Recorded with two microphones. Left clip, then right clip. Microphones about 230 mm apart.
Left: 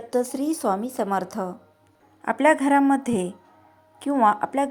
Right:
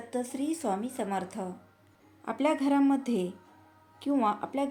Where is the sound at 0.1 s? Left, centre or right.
Left.